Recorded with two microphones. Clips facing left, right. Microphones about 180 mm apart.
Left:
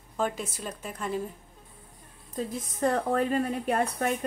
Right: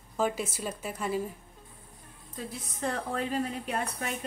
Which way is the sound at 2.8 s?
45° left (ahead or behind).